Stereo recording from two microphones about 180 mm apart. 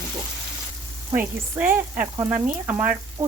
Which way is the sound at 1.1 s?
10° right (ahead or behind).